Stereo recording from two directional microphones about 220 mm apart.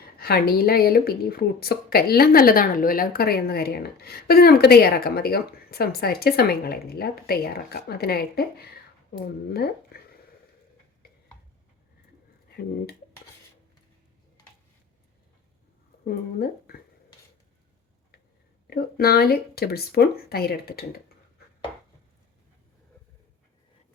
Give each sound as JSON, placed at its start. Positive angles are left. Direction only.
{"t": 0.2, "sound": "speech", "side_deg": 45}
{"t": 12.5, "sound": "speech", "side_deg": 45}
{"t": 16.0, "sound": "speech", "side_deg": 45}
{"t": 18.7, "sound": "speech", "side_deg": 45}